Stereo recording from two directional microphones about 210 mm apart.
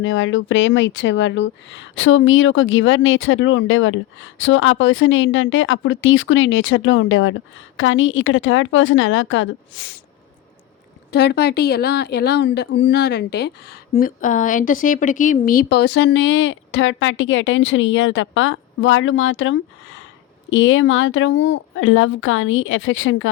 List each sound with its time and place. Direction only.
0.0 s speech: 65° left (ahead or behind)
11.1 s a woman's voice: 50° left (ahead or behind); by 23.3 s 70° left (ahead or behind)